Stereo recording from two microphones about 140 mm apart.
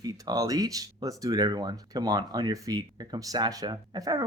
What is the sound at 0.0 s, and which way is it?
Speech, 25° right (ahead or behind).